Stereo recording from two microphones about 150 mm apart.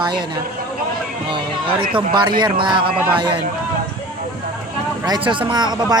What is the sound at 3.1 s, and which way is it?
Speech, 30° right (ahead or behind).